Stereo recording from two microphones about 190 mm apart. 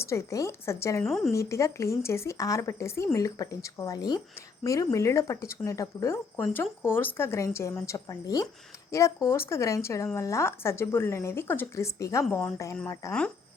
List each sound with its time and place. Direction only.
0.0 s speech: 15° left (ahead or behind)
1.0 s a woman's voice: centre (ahead or behind)
1.3 s speech: 15° left (ahead or behind)